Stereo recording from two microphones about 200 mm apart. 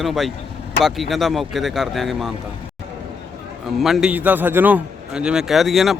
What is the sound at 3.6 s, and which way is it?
A man's voice, centre (ahead or behind).